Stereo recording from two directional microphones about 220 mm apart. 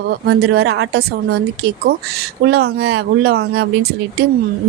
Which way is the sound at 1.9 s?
40° right (ahead or behind).